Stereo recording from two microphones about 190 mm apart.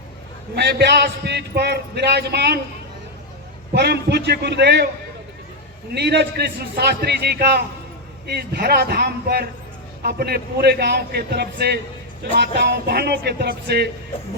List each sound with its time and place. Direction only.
0.5 s a man's voice: 60° right (ahead or behind)
3.8 s a man's voice: 60° right (ahead or behind)
5.9 s a man's voice: 60° right (ahead or behind)